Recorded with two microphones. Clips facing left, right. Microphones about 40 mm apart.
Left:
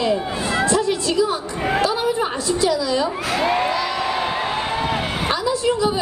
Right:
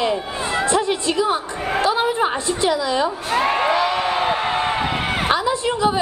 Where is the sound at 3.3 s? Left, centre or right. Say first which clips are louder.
Right 3 dB; right.